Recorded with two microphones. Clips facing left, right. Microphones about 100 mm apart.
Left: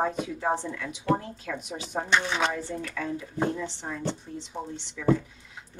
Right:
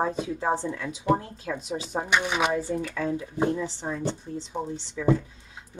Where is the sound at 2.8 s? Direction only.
30° right (ahead or behind).